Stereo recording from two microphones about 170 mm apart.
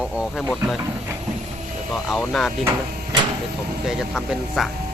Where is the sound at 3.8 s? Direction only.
Centre (ahead or behind).